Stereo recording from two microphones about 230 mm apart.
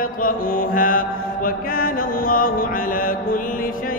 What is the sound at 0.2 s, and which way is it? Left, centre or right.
Mantra, left.